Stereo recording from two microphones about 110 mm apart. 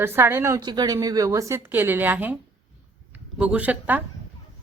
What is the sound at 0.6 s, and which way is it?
A man's voice, 40° right (ahead or behind).